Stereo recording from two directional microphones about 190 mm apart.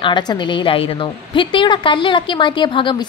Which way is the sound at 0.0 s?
25° left (ahead or behind).